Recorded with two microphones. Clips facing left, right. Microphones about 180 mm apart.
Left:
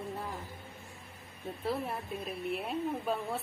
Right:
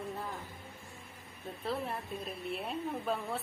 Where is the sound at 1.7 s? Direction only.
5° left (ahead or behind).